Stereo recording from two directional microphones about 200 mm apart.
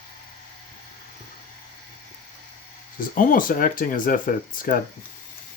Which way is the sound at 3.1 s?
45° left (ahead or behind).